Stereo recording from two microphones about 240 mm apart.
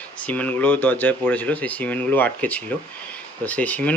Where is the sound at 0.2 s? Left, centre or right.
Centre.